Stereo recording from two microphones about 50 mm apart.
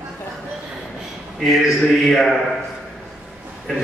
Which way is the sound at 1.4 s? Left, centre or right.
Centre.